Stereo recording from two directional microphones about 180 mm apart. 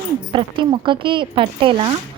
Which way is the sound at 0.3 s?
25° right (ahead or behind).